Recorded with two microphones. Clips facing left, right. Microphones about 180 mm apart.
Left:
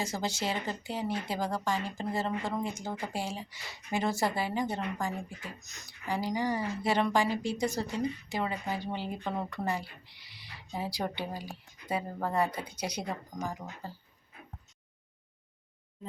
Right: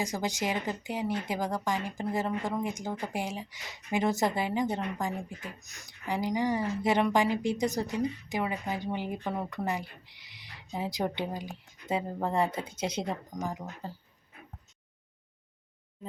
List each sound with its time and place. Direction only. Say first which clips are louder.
0.0 s a woman's voice: right 2 dB; 15° right (ahead or behind)